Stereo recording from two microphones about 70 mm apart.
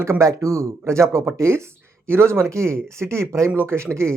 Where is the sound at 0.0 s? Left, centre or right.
Right.